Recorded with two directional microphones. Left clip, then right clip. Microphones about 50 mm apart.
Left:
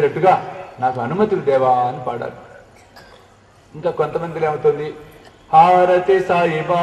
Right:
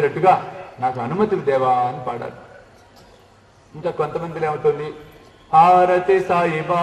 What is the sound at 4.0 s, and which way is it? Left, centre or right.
Speech, left.